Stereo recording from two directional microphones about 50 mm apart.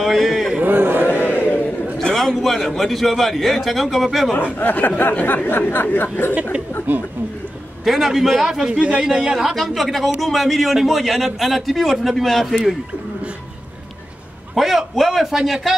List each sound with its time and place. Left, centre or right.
0.0 s a sound: centre
0.7 s a sound: right
1.0 s chant: left
2.0 s a man's voice: centre
4.6 s speech: left
6.9 s speech: right
7.8 s a man's voice: centre
14.5 s a man's voice: centre